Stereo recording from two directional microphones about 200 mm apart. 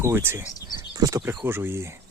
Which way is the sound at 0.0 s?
10° right (ahead or behind).